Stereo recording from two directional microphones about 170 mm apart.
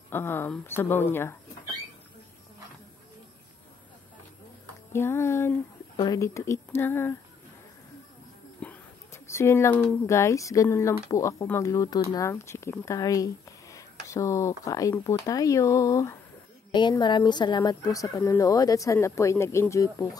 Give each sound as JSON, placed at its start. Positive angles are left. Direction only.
{"t": 0.1, "sound": "speech", "side_deg": 15}
{"t": 4.9, "sound": "speech", "side_deg": 15}
{"t": 8.5, "sound": "speech", "side_deg": 10}